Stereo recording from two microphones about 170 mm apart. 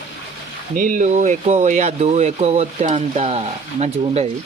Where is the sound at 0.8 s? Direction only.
50° right (ahead or behind).